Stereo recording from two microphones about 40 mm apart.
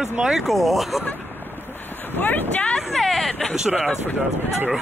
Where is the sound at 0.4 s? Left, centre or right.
Centre.